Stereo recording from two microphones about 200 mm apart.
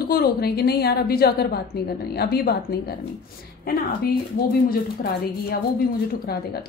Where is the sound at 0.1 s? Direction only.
50° left (ahead or behind).